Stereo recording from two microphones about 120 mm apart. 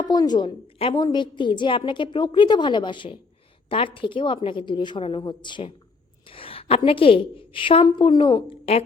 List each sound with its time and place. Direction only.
0.0 s a woman's voice: 35° left (ahead or behind); by 8.8 s 50° left (ahead or behind)